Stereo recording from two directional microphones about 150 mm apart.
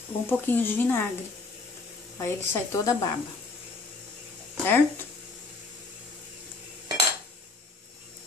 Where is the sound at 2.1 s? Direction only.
20° left (ahead or behind).